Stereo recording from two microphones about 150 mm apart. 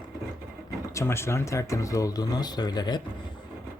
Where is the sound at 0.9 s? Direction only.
15° left (ahead or behind).